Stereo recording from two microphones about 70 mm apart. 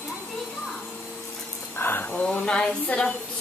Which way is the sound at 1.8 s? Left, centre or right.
Left.